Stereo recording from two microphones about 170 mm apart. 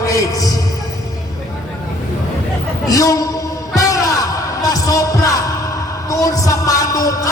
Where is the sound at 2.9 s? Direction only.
20° left (ahead or behind).